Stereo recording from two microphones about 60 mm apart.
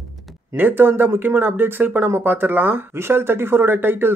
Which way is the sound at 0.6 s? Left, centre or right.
Right.